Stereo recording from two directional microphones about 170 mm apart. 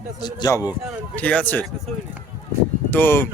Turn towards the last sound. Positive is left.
turn(degrees=10)  # may be behind; listen again after turning